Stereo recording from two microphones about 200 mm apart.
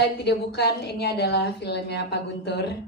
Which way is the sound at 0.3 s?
55° left (ahead or behind).